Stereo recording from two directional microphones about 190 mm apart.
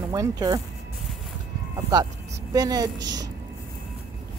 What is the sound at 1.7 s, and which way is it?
Speech, 20° right (ahead or behind).